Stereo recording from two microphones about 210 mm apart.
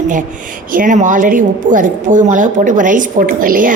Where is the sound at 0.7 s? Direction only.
40° right (ahead or behind).